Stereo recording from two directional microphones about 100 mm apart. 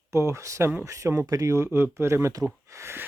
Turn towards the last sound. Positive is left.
turn(degrees=-25)  # may be behind; listen again after turning